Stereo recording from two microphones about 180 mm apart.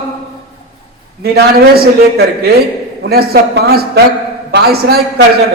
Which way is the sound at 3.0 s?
60° right (ahead or behind).